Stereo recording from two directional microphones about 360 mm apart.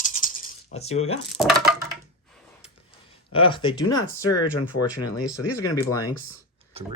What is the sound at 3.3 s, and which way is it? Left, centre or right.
Speech, centre.